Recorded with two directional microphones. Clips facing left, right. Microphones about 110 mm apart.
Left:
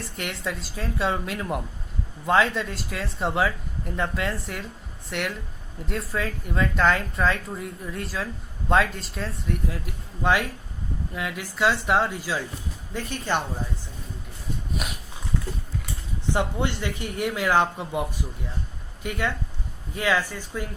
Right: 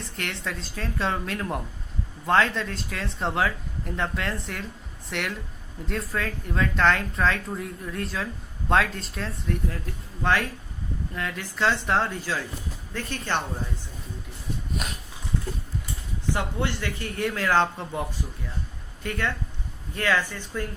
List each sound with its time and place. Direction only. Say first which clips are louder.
0.2 s speech: left 1 dB; 5° left (ahead or behind)
14.8 s a sound: even; 5° left (ahead or behind)
16.3 s speech: left 3 dB; 20° left (ahead or behind)